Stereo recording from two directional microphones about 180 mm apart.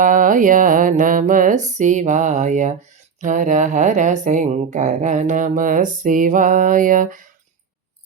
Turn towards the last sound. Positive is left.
turn(degrees=-50)  # may be behind; listen again after turning